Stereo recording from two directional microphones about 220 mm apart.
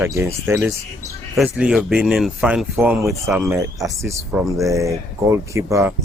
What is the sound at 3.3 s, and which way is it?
Speech, centre (ahead or behind).